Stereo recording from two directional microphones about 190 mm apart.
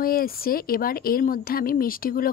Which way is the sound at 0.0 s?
50° left (ahead or behind).